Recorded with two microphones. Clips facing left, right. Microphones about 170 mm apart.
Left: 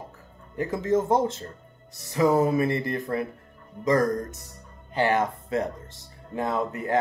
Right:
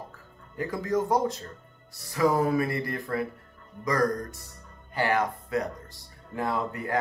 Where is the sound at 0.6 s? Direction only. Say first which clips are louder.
Left 3 dB; 25° left (ahead or behind).